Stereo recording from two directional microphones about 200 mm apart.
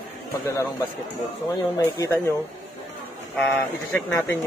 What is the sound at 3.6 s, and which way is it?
Speech, 10° left (ahead or behind).